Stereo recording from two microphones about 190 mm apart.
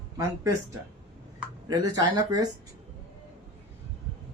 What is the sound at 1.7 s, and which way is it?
Speech, 20° right (ahead or behind).